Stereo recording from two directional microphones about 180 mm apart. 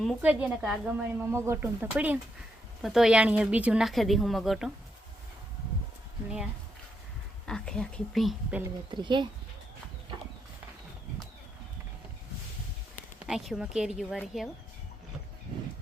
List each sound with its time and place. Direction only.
0.2 s a woman's voice: 10° right (ahead or behind)
7.4 s speech: 5° left (ahead or behind)
8.9 s speech: 25° right (ahead or behind)
13.2 s speech: 5° right (ahead or behind)